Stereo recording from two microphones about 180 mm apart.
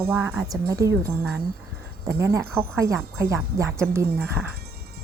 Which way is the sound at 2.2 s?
15° right (ahead or behind).